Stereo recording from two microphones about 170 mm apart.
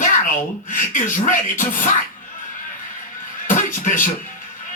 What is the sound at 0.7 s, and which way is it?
Speech, 50° left (ahead or behind).